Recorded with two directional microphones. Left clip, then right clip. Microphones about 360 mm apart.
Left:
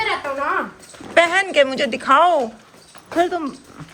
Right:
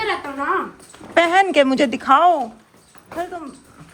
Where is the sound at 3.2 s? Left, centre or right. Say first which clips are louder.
Left 8 dB; left.